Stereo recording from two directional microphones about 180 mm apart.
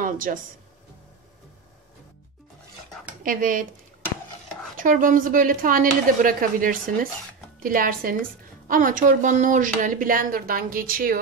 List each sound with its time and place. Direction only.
0.0 s speech: 50° right (ahead or behind)
3.3 s a woman's voice: 50° right (ahead or behind)
4.7 s a woman's voice: 50° right (ahead or behind)